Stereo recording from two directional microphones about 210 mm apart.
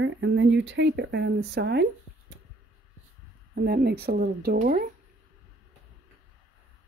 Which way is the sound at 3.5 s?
50° right (ahead or behind).